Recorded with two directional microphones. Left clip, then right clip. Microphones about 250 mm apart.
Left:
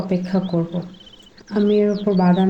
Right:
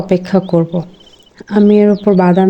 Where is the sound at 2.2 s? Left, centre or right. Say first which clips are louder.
Right 6 dB; right.